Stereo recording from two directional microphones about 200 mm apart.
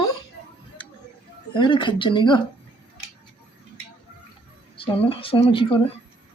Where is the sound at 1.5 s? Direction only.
25° left (ahead or behind).